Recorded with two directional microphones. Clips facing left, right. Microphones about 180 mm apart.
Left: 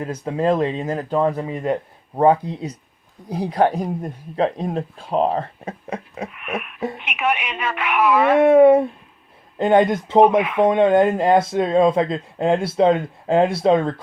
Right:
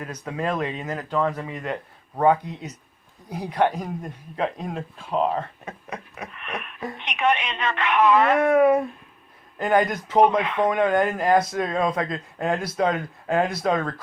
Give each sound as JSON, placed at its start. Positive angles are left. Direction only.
{"t": 0.0, "sound": "speech", "side_deg": 30}
{"t": 6.3, "sound": "wheeze", "side_deg": 5}
{"t": 6.9, "sound": "a woman's voice", "side_deg": 5}
{"t": 8.4, "sound": "speech", "side_deg": 25}